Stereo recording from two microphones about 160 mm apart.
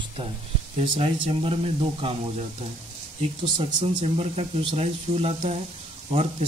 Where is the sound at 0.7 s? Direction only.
35° right (ahead or behind).